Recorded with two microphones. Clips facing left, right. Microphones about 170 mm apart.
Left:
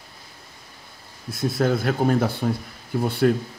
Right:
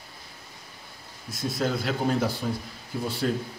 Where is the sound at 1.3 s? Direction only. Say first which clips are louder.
Left 6 dB; 55° left (ahead or behind).